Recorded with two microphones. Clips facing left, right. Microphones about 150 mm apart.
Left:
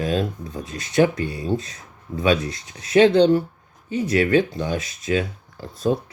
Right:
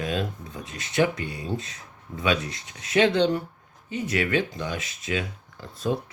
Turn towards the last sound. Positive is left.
turn(degrees=35)  # may be behind; listen again after turning